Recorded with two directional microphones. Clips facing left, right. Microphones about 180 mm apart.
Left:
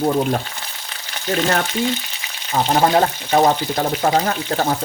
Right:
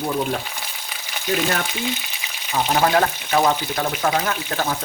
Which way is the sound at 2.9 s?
35° left (ahead or behind).